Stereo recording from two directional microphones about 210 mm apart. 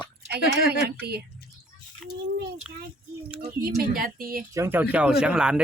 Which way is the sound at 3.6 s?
45° right (ahead or behind).